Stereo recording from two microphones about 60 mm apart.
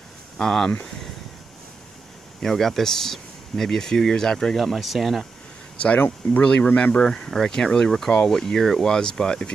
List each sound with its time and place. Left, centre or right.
0.4 s speech: centre
2.4 s speech: centre
5.9 s speech: left
6.4 s speech: centre